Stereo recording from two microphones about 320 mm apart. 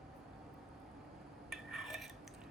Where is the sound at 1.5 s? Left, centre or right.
Centre.